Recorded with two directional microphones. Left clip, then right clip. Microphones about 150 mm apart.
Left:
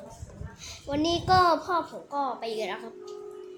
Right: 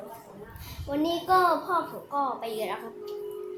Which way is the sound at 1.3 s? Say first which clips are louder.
Left 1 dB; 40° left (ahead or behind).